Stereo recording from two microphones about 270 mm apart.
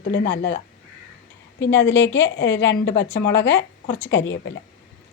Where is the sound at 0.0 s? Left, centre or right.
Left.